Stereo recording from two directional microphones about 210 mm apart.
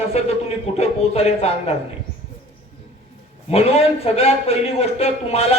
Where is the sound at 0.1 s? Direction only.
30° left (ahead or behind).